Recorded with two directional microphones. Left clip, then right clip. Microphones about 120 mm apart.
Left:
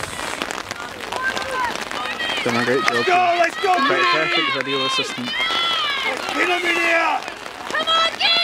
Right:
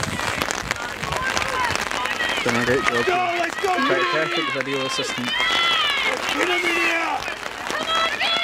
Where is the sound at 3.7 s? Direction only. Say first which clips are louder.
Left 2 dB; 45° left (ahead or behind).